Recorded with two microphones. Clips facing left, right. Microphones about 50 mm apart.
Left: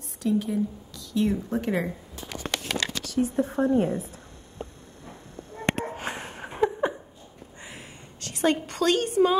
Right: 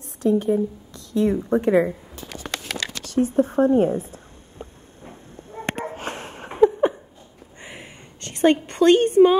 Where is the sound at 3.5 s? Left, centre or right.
Right.